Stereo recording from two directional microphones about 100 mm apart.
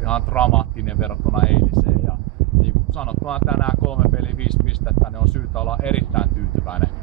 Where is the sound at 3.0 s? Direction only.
10° left (ahead or behind).